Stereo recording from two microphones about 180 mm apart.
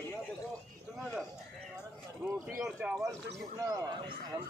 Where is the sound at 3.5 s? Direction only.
20° right (ahead or behind).